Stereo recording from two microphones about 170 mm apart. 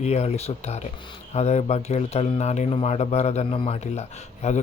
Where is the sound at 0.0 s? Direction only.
40° left (ahead or behind).